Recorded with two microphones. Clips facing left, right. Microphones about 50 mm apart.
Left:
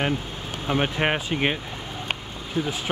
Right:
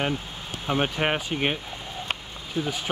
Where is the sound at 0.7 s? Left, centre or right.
Centre.